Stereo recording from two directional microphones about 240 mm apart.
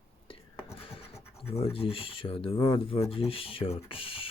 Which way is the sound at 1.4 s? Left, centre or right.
Left.